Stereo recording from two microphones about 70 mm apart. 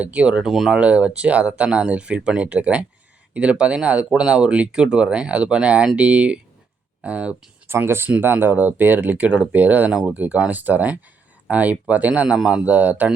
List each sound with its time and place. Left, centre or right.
0.0 s speech: centre
0.5 s speech: centre
0.8 s speech: centre
7.7 s speech: right